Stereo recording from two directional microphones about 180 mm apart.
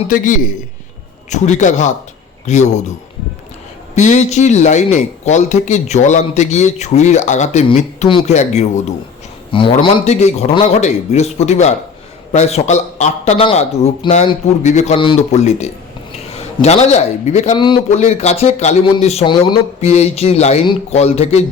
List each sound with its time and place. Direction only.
1.3 s a man's voice: 40° left (ahead or behind)
3.9 s a man's voice: 40° left (ahead or behind)
9.5 s a man's voice: 30° left (ahead or behind)
14.9 s a man's voice: 30° left (ahead or behind)
19.8 s a man's voice: 35° left (ahead or behind)